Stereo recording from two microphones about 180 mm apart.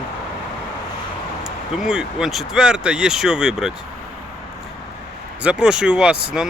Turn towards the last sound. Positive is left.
turn(degrees=-5)  # may be behind; listen again after turning